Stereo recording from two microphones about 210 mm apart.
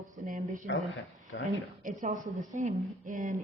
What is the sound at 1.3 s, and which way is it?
Speech, 65° left (ahead or behind).